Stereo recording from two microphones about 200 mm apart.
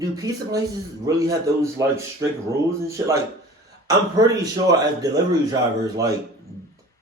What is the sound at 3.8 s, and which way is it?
A man's voice, 20° right (ahead or behind).